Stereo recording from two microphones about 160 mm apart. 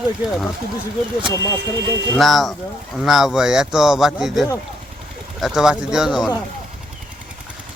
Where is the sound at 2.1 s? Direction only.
Centre (ahead or behind).